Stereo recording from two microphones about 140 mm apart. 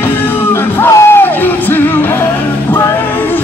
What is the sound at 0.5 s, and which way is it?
Music, 20° left (ahead or behind).